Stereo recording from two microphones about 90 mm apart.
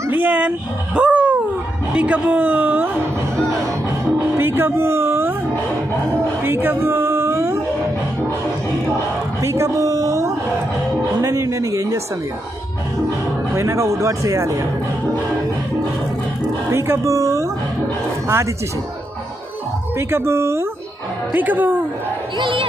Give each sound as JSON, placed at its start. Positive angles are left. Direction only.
{"t": 0.1, "sound": "a man's voice", "side_deg": -20}
{"t": 4.2, "sound": "speech", "side_deg": -25}
{"t": 6.4, "sound": "a sound", "side_deg": -25}
{"t": 9.4, "sound": "a sound", "side_deg": -30}
{"t": 11.1, "sound": "speech", "side_deg": -40}
{"t": 13.6, "sound": "speech", "side_deg": -35}
{"t": 16.7, "sound": "speech", "side_deg": -30}
{"t": 20.0, "sound": "speech", "side_deg": -30}
{"t": 21.3, "sound": "speech", "side_deg": -20}
{"t": 22.4, "sound": "speech", "side_deg": -70}